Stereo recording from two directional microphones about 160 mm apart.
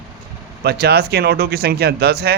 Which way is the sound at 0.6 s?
80° right.